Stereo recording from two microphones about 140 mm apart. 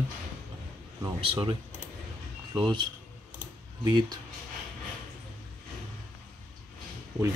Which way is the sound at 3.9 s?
30° right (ahead or behind).